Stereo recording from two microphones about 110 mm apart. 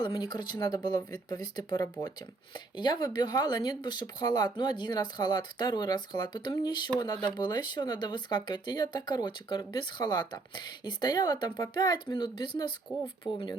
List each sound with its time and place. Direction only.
0.0 s speech: 40° left (ahead or behind)